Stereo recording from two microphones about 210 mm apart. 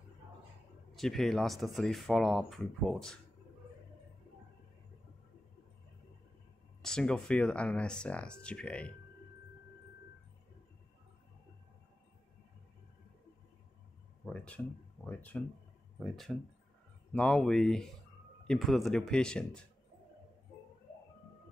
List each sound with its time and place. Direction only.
0.9 s speech: centre (ahead or behind)
6.8 s speech: 5° left (ahead or behind)
14.2 s a sound: 5° left (ahead or behind)
15.0 s speech: 10° left (ahead or behind)